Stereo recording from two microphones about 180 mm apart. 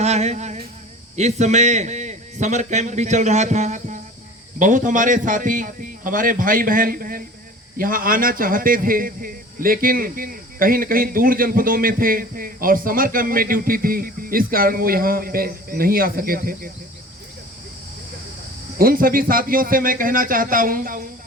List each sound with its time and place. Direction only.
0.0 s a man's voice: 40° right (ahead or behind); by 16.7 s 55° right (ahead or behind)
18.8 s a man's voice: 55° right (ahead or behind)